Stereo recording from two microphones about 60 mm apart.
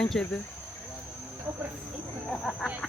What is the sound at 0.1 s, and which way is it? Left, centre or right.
Speech, centre.